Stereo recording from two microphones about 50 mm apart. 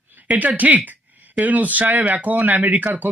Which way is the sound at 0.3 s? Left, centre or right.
Right.